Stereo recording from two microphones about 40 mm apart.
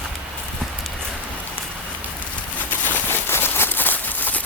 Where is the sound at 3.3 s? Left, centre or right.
Left.